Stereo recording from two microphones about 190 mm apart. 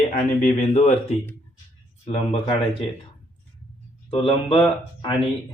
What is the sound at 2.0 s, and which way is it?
Speech, 30° left (ahead or behind).